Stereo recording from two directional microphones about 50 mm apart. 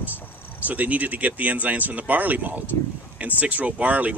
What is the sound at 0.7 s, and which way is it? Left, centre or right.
Speech, right.